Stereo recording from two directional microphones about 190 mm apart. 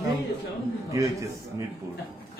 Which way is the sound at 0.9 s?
15° right (ahead or behind).